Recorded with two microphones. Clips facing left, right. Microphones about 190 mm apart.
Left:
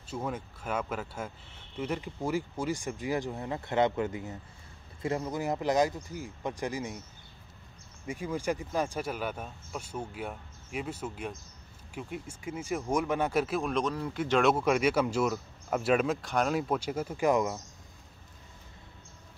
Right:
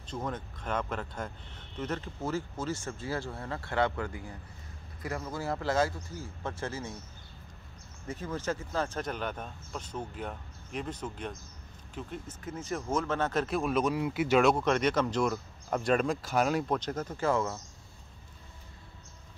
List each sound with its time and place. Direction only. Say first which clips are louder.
0.1 s speech: left 1 dB; 10° left (ahead or behind)
8.1 s speech: left 2 dB; 10° left (ahead or behind); by 14.5 s 10° right (ahead or behind)
14.5 s speech: left 1 dB; 5° left (ahead or behind)